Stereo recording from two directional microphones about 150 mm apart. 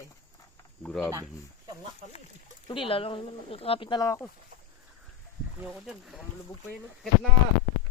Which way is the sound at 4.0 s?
20° left (ahead or behind).